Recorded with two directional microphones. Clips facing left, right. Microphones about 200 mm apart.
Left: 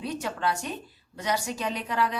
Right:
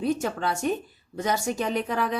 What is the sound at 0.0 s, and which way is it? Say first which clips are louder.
Speech: right 4 dB; 50° right (ahead or behind).